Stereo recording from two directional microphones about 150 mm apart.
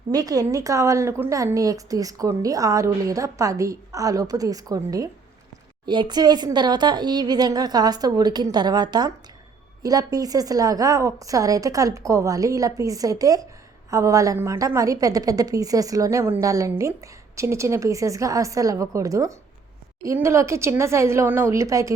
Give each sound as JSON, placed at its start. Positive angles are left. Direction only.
{"t": 0.1, "sound": "a woman's voice", "side_deg": -25}